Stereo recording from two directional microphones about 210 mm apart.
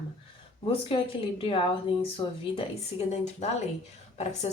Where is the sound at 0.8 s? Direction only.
25° left (ahead or behind).